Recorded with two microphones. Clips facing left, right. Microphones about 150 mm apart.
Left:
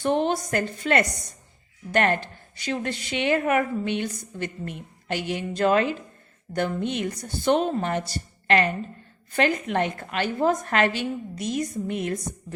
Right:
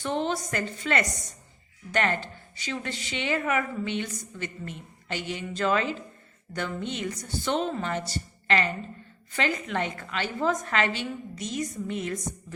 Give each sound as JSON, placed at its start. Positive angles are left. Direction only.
{"t": 0.0, "sound": "a woman's voice", "side_deg": 55}